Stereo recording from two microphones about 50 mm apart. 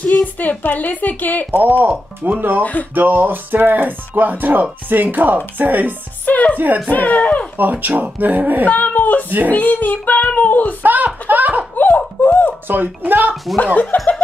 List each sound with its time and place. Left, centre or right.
0.2 s a woman's voice: left
1.6 s speech: right
2.6 s a woman's voice: left
2.9 s speech: right
6.2 s music: left
6.9 s a woman's voice: left
7.5 s speech: right
8.6 s a woman's voice: left
10.8 s speech: right
11.7 s laughter: left
12.2 s speech: left
12.6 s speech: right
13.9 s a woman's voice: left